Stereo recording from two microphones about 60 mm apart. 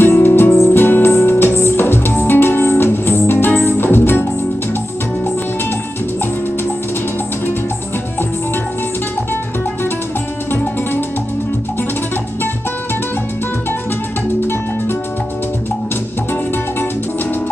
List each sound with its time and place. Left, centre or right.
0.0 s music: left
10.5 s music: left